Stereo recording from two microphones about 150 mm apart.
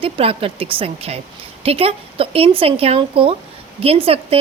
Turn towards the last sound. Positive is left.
turn(degrees=-40)  # may be behind; listen again after turning